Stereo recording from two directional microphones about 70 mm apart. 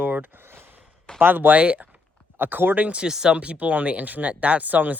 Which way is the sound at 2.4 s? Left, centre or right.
Right.